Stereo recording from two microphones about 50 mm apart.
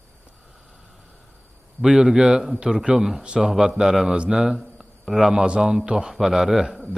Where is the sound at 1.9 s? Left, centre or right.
Centre.